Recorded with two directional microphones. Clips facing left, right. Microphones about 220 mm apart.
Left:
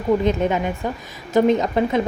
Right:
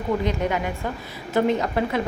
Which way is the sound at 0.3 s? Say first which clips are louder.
Left 5 dB; 20° left (ahead or behind).